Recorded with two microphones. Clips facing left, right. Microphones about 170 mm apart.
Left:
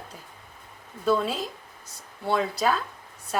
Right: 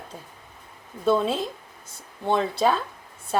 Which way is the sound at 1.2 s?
25° right (ahead or behind).